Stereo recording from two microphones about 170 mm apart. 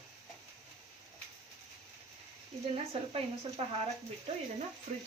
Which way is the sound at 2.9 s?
35° right (ahead or behind).